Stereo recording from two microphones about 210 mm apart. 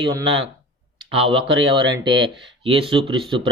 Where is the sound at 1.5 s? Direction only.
65° right (ahead or behind).